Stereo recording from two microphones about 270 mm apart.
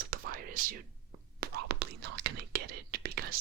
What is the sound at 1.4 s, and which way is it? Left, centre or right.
Speech, right.